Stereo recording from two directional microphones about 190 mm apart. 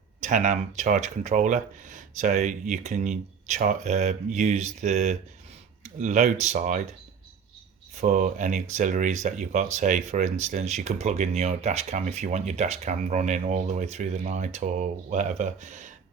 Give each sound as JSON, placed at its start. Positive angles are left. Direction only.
{"t": 0.2, "sound": "speech", "side_deg": -40}
{"t": 8.0, "sound": "speech", "side_deg": -45}